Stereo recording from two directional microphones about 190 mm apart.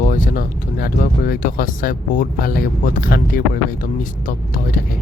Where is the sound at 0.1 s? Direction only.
45° left (ahead or behind).